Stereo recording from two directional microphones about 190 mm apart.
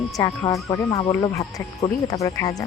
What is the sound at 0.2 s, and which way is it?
Speech, 20° left (ahead or behind).